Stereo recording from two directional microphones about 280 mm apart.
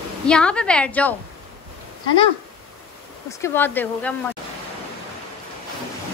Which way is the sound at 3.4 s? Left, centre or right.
Centre.